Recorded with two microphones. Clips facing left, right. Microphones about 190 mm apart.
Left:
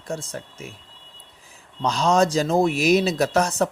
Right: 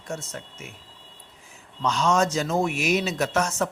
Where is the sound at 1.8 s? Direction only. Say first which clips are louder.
Left 3 dB; 35° left (ahead or behind).